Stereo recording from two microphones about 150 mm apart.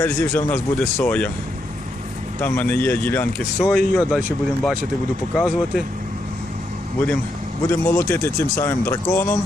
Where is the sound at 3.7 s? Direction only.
5° right (ahead or behind).